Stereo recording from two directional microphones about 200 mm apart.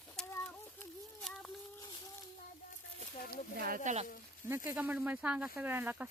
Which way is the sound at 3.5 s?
45° right (ahead or behind).